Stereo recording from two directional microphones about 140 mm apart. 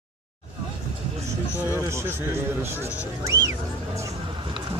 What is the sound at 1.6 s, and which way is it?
Speech, 15° right (ahead or behind).